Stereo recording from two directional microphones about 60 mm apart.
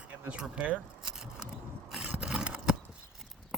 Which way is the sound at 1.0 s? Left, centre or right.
Centre.